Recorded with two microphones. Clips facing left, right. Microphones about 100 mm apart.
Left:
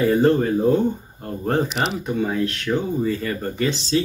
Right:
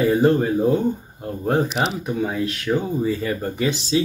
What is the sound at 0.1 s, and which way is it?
Speech, 10° right (ahead or behind).